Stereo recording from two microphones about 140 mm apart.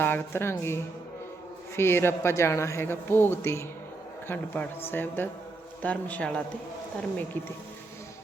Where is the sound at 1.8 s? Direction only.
15° left (ahead or behind).